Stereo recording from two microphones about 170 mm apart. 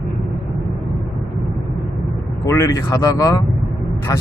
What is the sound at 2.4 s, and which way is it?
Speech, 15° left (ahead or behind).